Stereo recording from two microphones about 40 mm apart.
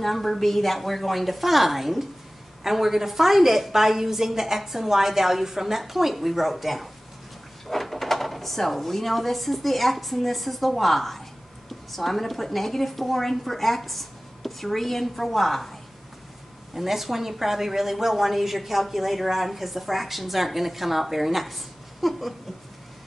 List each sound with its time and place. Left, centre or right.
0.0 s a woman's voice: centre
16.7 s a woman's voice: centre